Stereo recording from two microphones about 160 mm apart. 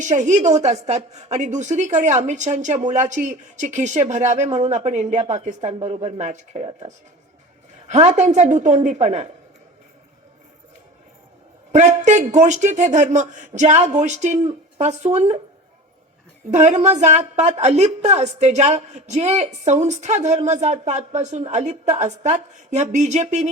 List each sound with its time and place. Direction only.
0.0 s a woman's voice: 50° right (ahead or behind)
7.9 s a woman's voice: 45° right (ahead or behind)
11.7 s a woman's voice: 45° right (ahead or behind)
16.5 s a woman's voice: 45° right (ahead or behind)